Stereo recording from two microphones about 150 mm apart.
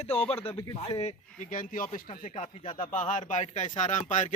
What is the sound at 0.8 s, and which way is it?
A man's voice, 45° left (ahead or behind).